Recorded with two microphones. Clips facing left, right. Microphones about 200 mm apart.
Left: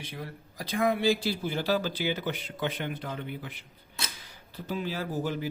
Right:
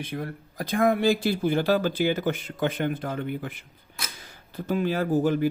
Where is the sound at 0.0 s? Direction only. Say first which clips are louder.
Right 7 dB; 55° right (ahead or behind).